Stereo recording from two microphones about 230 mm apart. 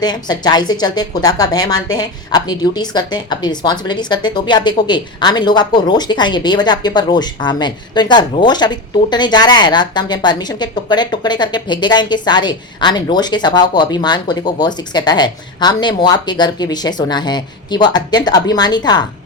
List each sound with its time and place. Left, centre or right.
0.0 s a woman's voice: centre